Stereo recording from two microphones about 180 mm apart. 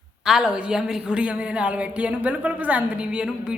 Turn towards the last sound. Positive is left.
turn(degrees=-5)  # may be behind; listen again after turning